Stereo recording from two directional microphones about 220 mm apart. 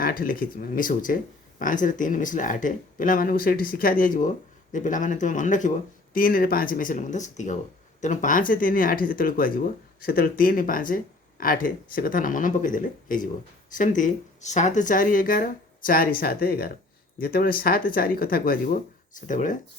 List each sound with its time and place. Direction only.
0.0 s speech: 40° left (ahead or behind)